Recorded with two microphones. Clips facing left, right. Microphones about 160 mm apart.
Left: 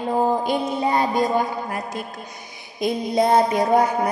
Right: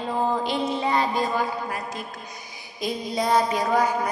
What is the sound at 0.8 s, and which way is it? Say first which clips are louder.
Speech: left 3 dB; 45° left (ahead or behind).